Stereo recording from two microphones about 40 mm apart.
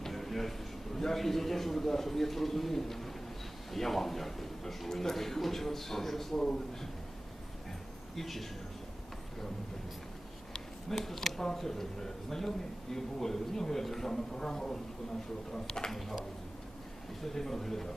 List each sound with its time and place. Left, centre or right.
0.0 s a sound: centre
0.9 s a man's voice: centre
6.3 s a man's voice: centre
8.1 s a man's voice: centre
10.5 s a sound: centre
11.3 s speech: centre
16.0 s a man's voice: centre
17.2 s speech: centre